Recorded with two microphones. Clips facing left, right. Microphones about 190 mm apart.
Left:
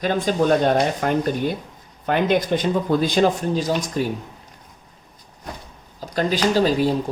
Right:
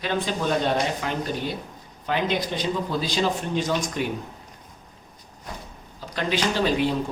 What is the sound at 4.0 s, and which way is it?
Speech, 40° left (ahead or behind).